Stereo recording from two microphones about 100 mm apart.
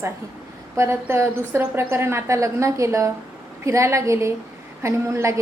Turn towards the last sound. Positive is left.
turn(degrees=-25)  # may be behind; listen again after turning